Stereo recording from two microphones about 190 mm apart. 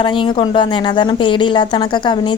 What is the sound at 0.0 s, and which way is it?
A woman's voice, 25° left (ahead or behind).